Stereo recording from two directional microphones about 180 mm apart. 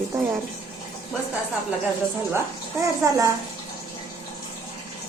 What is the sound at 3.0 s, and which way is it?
Speech, 15° right (ahead or behind).